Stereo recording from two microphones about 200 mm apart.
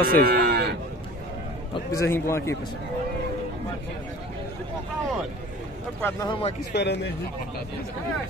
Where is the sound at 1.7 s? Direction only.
15° left (ahead or behind).